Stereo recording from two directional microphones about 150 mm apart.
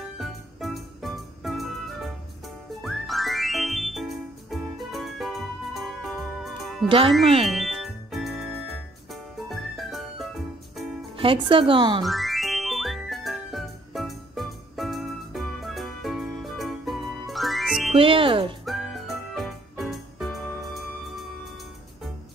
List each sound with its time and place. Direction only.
0.2 s music: centre (ahead or behind)
11.1 s speech: 35° right (ahead or behind)
12.0 s music: centre (ahead or behind)
17.9 s speech: 35° right (ahead or behind)
18.7 s music: centre (ahead or behind)